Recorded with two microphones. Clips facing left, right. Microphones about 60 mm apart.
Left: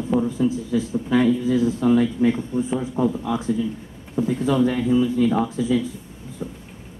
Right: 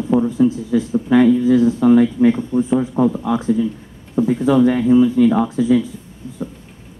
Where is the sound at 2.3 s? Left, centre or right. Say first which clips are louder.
Right 6 dB; centre.